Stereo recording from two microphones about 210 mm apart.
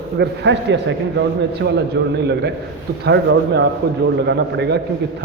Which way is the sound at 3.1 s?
55° right (ahead or behind).